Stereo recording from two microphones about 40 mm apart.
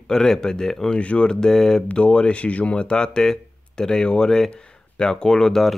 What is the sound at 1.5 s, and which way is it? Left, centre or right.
Speech, centre.